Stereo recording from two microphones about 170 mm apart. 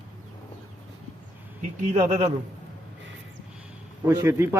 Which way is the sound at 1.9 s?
40° right (ahead or behind).